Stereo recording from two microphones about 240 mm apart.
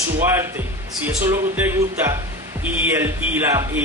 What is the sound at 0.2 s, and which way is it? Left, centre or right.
A man's voice, centre.